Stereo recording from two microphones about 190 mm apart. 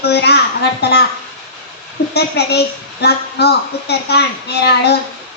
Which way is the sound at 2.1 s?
60° left (ahead or behind).